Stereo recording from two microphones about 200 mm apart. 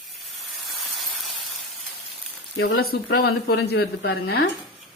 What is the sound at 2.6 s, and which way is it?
Speech, 55° left (ahead or behind).